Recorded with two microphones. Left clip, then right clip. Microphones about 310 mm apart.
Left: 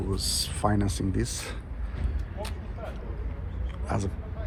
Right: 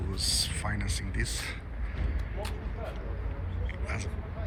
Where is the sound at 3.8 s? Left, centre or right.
Centre.